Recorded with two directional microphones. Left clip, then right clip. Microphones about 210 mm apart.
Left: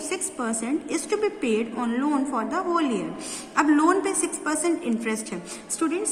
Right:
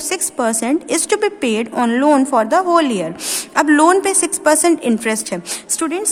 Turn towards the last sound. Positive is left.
turn(degrees=-50)  # may be behind; listen again after turning